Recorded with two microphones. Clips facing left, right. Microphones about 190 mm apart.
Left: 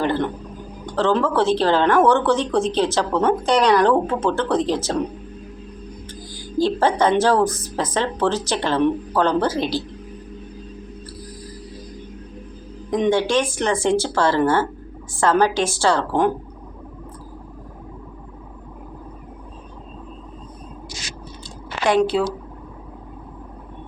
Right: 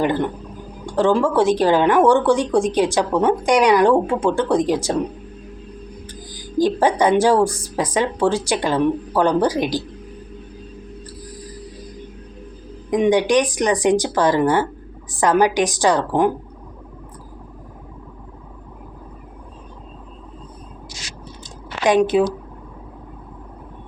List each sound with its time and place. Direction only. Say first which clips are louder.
0.0 s a woman's voice: right 2 dB; 15° right (ahead or behind)
6.1 s a woman's voice: even; 15° right (ahead or behind)
12.9 s a woman's voice: right 3 dB; 15° right (ahead or behind)
21.8 s a woman's voice: right 3 dB; 20° right (ahead or behind)